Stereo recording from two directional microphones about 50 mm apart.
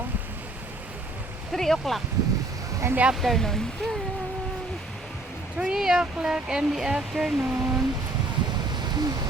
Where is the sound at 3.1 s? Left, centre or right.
Centre.